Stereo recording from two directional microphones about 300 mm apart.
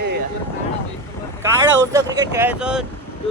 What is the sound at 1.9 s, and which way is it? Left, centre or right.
Speech, centre.